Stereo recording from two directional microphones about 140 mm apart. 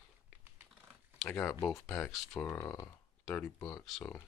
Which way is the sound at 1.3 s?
15° left (ahead or behind).